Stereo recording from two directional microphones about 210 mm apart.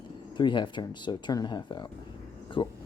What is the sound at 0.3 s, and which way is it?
Speech, 20° left (ahead or behind).